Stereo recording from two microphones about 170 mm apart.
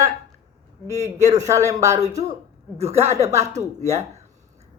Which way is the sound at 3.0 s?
15° right (ahead or behind).